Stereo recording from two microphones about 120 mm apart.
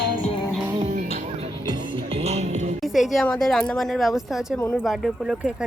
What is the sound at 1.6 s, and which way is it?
Music, 35° right (ahead or behind).